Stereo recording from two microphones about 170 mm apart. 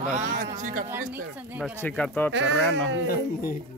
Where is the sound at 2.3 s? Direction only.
90° right.